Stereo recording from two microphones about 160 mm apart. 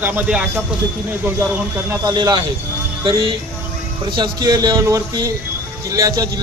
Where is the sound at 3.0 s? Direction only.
30° right (ahead or behind).